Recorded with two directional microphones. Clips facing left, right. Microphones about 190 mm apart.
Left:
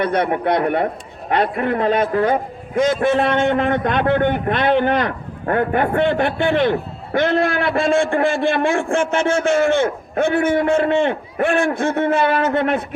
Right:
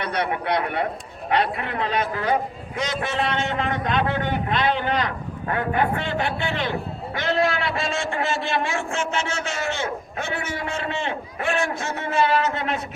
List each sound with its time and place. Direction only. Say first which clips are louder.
0.0 s a man's voice: left 7 dB; 50° left (ahead or behind)